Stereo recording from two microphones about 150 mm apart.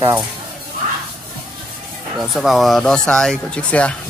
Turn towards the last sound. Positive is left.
turn(degrees=10)  # may be behind; listen again after turning